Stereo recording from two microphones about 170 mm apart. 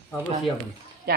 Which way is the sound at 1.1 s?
65° right (ahead or behind).